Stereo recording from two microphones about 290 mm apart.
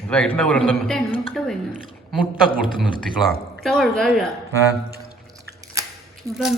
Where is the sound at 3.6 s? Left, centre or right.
Centre.